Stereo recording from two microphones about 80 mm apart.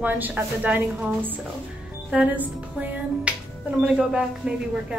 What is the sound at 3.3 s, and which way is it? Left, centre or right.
Finger snapping, centre.